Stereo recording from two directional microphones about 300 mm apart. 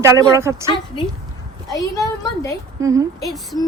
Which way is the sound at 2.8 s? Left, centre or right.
Centre.